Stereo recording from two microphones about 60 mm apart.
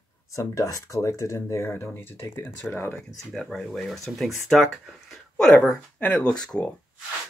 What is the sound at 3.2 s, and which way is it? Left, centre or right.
Speech, centre.